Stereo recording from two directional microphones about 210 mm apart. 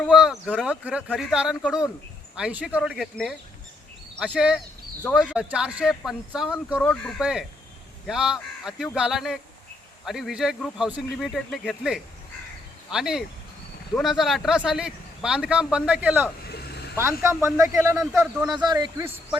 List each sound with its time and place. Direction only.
0.0 s speech: centre (ahead or behind)
16.5 s vehicle: 50° left (ahead or behind)
17.0 s speech: 10° right (ahead or behind)
18.2 s speech: 5° right (ahead or behind)
18.5 s a man's voice: 20° right (ahead or behind)